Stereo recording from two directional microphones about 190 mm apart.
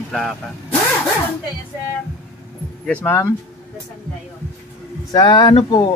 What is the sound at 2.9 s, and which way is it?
Speech, 10° left (ahead or behind).